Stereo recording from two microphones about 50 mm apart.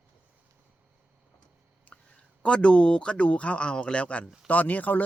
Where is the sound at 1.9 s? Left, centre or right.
Left.